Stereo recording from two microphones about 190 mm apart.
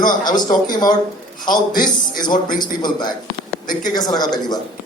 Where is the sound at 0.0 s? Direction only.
20° left (ahead or behind).